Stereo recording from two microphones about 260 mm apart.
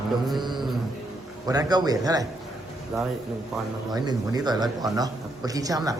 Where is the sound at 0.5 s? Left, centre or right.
Centre.